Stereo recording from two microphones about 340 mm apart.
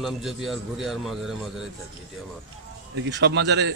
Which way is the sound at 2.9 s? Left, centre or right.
Right.